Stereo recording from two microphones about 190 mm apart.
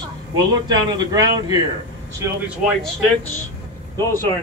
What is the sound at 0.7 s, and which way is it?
Speech, 20° right (ahead or behind).